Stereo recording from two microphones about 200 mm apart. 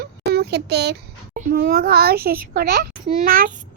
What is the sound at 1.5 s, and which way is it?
A child's voice, 50° right (ahead or behind).